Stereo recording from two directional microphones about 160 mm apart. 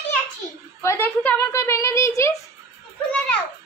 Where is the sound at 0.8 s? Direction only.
15° left (ahead or behind).